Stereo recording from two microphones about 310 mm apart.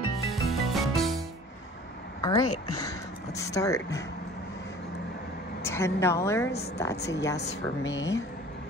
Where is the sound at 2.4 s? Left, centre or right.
Left.